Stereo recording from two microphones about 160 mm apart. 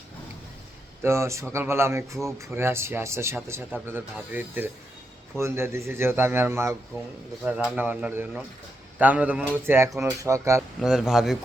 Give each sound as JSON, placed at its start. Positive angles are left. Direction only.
{"t": 1.0, "sound": "speech", "side_deg": -15}
{"t": 10.8, "sound": "speech", "side_deg": -5}